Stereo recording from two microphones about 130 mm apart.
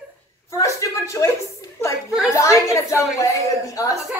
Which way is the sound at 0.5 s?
25° left (ahead or behind).